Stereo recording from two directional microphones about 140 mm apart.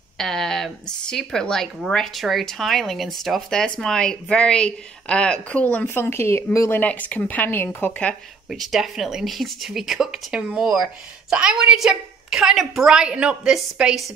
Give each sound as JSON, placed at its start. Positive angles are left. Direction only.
{"t": 0.2, "sound": "speech", "side_deg": 5}
{"t": 8.5, "sound": "speech", "side_deg": 0}